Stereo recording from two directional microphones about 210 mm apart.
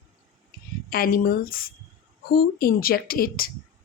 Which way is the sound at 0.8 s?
45° left (ahead or behind).